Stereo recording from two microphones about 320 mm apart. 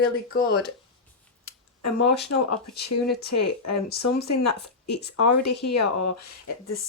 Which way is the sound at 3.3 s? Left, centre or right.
Left.